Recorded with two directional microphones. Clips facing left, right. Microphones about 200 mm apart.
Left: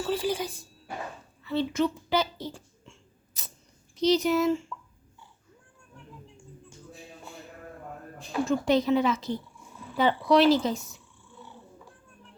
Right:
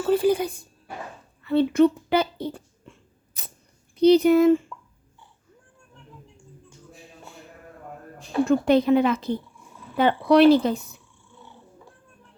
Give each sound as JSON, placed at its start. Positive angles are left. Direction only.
{"t": 0.0, "sound": "speech", "side_deg": -55}
{"t": 1.5, "sound": "a sound", "side_deg": -55}
{"t": 3.9, "sound": "speech", "side_deg": -60}
{"t": 8.4, "sound": "speech", "side_deg": -60}